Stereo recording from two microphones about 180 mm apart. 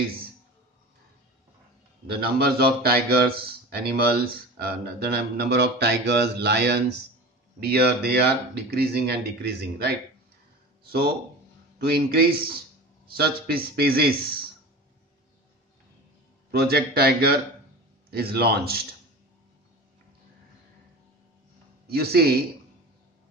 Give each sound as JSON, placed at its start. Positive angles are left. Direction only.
{"t": 2.0, "sound": "speech", "side_deg": -60}
{"t": 16.5, "sound": "speech", "side_deg": -60}
{"t": 21.8, "sound": "speech", "side_deg": -60}